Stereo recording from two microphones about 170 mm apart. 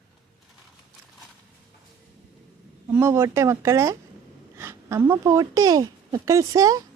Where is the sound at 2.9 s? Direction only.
15° right (ahead or behind).